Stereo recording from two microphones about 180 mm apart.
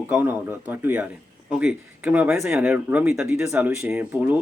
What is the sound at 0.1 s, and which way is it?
Speech, 10° right (ahead or behind).